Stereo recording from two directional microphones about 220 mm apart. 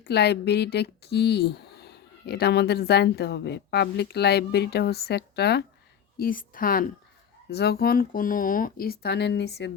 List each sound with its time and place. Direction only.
0.0 s a woman's voice: 50° left (ahead or behind)